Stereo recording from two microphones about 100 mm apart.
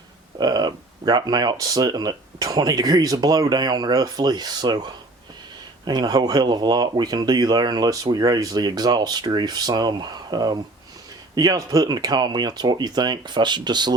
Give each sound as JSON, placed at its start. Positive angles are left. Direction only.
{"t": 0.3, "sound": "speech", "side_deg": -45}